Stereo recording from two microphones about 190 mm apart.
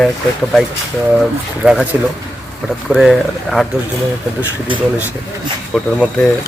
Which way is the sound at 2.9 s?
Centre (ahead or behind).